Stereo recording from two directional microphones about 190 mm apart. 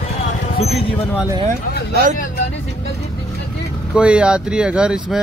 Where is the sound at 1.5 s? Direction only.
45° right (ahead or behind).